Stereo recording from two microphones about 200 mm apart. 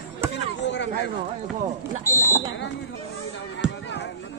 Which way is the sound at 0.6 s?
60° left (ahead or behind).